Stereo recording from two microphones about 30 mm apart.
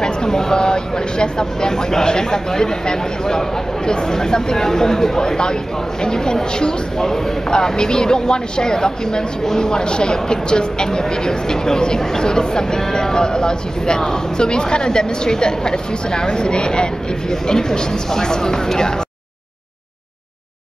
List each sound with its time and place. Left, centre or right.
0.0 s speech: left